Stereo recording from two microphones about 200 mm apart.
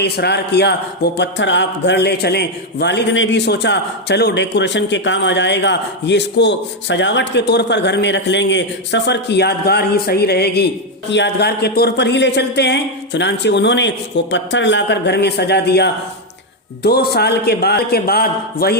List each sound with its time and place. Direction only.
0.0 s a man's voice: 55° left (ahead or behind)